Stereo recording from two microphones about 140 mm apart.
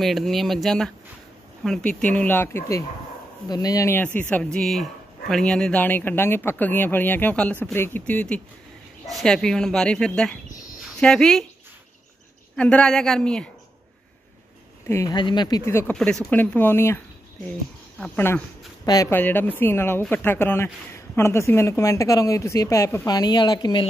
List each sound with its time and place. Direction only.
0.0 s speech: centre (ahead or behind)
12.5 s speech: 10° left (ahead or behind)
14.9 s speech: 20° left (ahead or behind)
15.1 s speech: 30° left (ahead or behind)
15.9 s speech: 5° left (ahead or behind)
17.9 s speech: 5° left (ahead or behind)
18.9 s speech: 25° left (ahead or behind)
19.1 s speech: 15° left (ahead or behind); by 23.9 s 30° left (ahead or behind)